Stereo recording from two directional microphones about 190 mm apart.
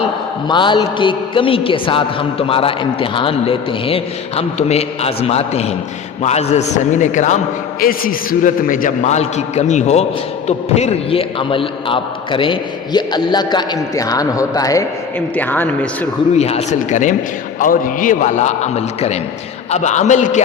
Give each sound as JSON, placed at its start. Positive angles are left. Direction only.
{"t": 0.4, "sound": "a man's voice", "side_deg": 25}
{"t": 16.3, "sound": "a man's voice", "side_deg": 35}